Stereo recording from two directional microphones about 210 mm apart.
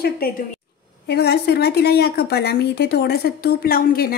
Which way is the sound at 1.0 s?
50° left (ahead or behind).